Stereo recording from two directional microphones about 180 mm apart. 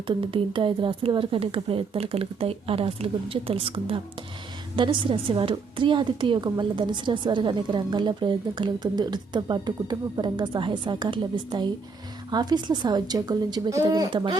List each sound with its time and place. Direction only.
0.1 s a woman's voice: 30° right (ahead or behind)